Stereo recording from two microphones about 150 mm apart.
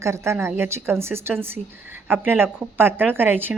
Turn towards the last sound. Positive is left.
turn(degrees=-15)  # may be behind; listen again after turning